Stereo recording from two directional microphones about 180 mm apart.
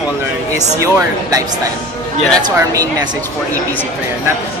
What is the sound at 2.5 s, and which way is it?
Speech, 20° right (ahead or behind).